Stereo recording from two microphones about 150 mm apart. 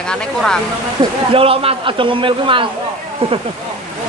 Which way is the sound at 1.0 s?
40° right (ahead or behind).